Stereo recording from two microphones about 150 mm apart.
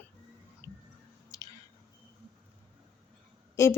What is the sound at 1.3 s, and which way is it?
Drip, 25° left (ahead or behind).